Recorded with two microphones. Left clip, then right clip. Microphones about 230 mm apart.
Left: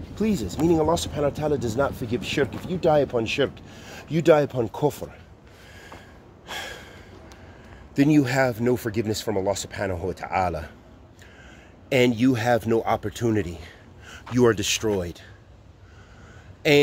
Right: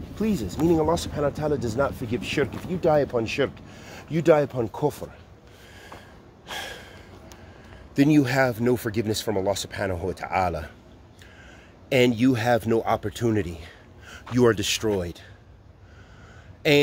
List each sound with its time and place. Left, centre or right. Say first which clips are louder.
0.1 s speech: left 2 dB; centre
5.8 s gasp: even; centre
7.9 s speech: even; centre
11.9 s speech: even; centre
16.6 s speech: left 1 dB; centre